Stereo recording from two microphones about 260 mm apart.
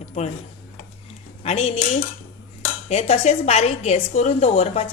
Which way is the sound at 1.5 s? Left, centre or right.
Left.